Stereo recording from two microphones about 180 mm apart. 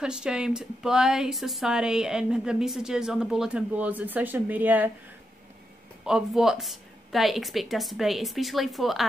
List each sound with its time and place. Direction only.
0.0 s speech: 5° right (ahead or behind)
6.0 s speech: 5° right (ahead or behind)